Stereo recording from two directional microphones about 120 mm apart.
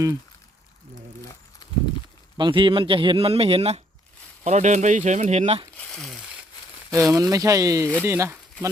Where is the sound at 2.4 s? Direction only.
40° right (ahead or behind); by 3.8 s 60° right (ahead or behind).